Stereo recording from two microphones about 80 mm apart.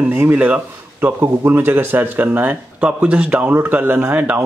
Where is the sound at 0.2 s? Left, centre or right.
Centre.